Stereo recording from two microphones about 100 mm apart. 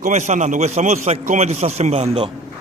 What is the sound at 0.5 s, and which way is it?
A man's voice, 90° right.